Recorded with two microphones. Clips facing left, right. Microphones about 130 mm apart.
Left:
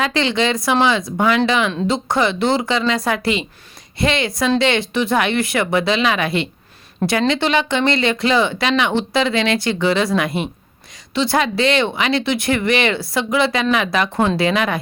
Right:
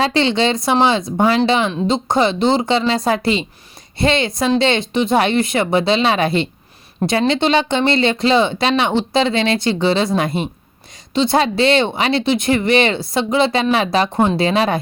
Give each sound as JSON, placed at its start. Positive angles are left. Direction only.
{"t": 0.0, "sound": "speech", "side_deg": -30}